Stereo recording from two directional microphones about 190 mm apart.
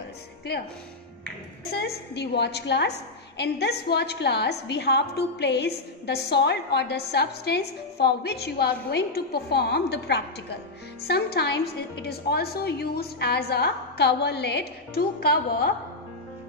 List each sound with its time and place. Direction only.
1.7 s a woman's voice: 55° left (ahead or behind)